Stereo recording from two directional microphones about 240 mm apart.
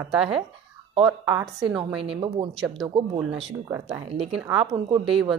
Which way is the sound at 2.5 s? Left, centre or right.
Centre.